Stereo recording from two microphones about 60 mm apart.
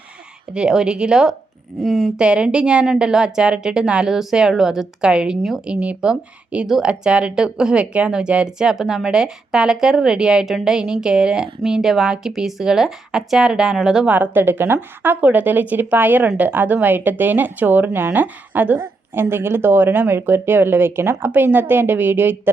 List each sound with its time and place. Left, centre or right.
0.5 s speech: centre
14.1 s a woman's voice: right
19.1 s a woman's voice: right